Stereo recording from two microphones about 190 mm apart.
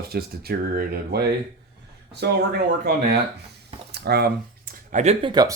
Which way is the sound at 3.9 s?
60° right (ahead or behind).